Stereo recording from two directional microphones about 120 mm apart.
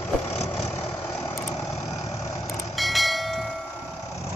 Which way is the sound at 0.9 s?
20° left (ahead or behind).